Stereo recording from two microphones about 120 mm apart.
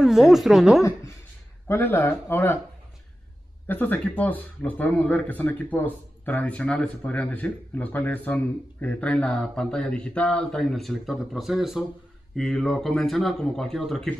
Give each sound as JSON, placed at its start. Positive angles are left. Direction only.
{"t": 0.0, "sound": "speech", "side_deg": 0}
{"t": 1.7, "sound": "speech", "side_deg": 15}
{"t": 3.6, "sound": "speech", "side_deg": 15}